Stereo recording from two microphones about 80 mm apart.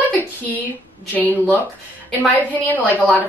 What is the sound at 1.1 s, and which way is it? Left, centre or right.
Speech, left.